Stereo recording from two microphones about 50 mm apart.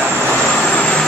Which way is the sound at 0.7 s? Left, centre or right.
Left.